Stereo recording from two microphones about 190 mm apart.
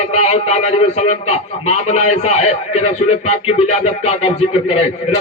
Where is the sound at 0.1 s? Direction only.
35° left (ahead or behind).